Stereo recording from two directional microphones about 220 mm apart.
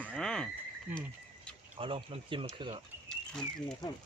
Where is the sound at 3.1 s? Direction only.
Centre (ahead or behind).